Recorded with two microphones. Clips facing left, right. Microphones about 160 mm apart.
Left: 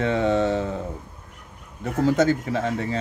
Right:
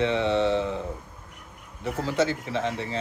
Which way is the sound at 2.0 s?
45° left (ahead or behind).